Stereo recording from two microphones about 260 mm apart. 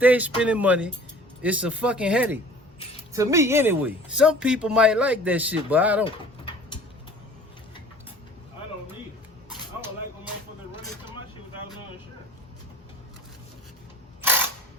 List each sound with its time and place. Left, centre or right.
0.0 s speech: centre
6.1 s pigeon: centre